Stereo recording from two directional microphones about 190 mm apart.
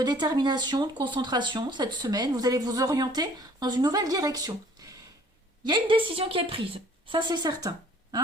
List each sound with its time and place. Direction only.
0.0 s speech: 20° right (ahead or behind)